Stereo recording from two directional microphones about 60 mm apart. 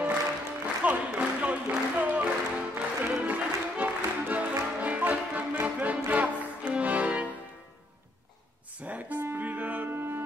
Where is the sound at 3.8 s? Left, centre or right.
Right.